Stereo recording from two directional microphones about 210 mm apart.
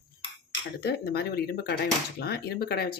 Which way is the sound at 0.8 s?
50° left (ahead or behind).